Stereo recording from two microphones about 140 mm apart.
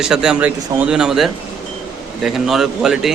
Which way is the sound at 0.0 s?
5° right (ahead or behind).